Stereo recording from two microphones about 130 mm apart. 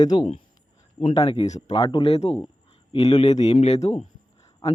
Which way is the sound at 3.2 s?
60° left (ahead or behind).